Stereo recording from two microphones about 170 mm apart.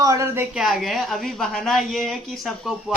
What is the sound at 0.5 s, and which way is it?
A woman's voice, centre (ahead or behind).